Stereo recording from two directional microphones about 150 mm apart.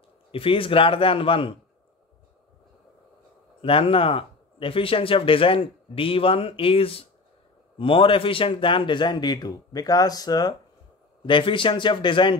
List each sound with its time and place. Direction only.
0.3 s speech: 35° left (ahead or behind)
3.6 s speech: 35° left (ahead or behind)